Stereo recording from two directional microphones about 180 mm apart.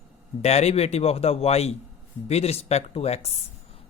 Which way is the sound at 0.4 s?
35° left (ahead or behind).